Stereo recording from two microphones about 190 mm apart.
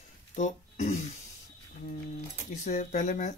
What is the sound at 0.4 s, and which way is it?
Speech, 40° left (ahead or behind).